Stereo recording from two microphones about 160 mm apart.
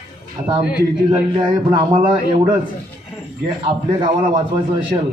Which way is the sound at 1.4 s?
30° right (ahead or behind).